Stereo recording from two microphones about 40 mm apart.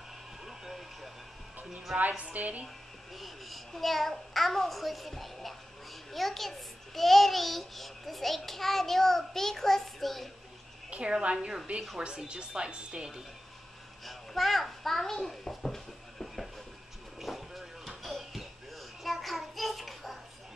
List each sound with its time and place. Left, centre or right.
0.5 s a sound: centre
2.0 s a woman's voice: right
3.2 s a child's voice: centre
10.9 s a woman's voice: right
14.0 s a sound: centre
17.2 s bouncing: centre